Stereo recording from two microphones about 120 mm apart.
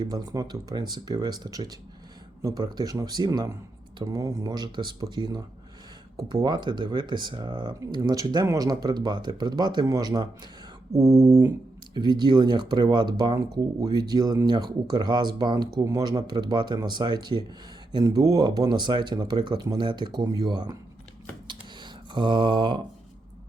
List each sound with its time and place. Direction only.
0.0 s speech: 35° right (ahead or behind)
10.9 s a sound: 30° right (ahead or behind)
11.9 s speech: 40° right (ahead or behind)
21.4 s typing: 40° right (ahead or behind)